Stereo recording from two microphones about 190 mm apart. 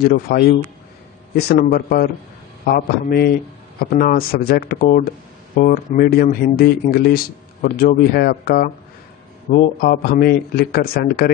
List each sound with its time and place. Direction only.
0.0 s speech: 55° left (ahead or behind)